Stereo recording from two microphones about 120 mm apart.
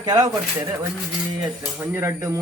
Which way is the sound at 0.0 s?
30° right (ahead or behind).